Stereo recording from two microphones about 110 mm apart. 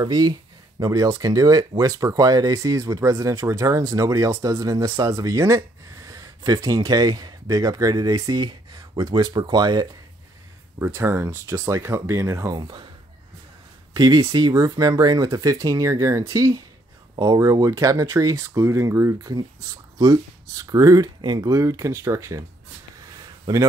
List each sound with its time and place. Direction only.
0.0 s speech: 35° right (ahead or behind)
10.8 s speech: 25° right (ahead or behind)
12.5 s speech: 40° right (ahead or behind)
13.9 s speech: 40° right (ahead or behind)
23.5 s speech: 35° right (ahead or behind)